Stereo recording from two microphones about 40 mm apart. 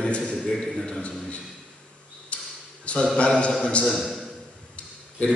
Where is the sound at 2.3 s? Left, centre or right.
Left.